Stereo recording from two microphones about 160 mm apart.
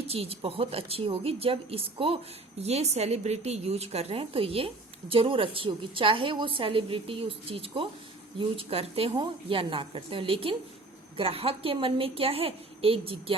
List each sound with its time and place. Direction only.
0.1 s speech: 40° right (ahead or behind)